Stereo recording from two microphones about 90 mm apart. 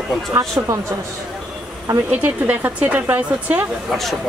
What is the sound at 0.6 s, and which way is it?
Speech, 30° right (ahead or behind).